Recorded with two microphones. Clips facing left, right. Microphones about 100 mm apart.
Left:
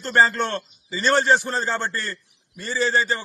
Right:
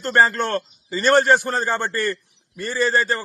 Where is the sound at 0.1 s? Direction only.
50° right (ahead or behind).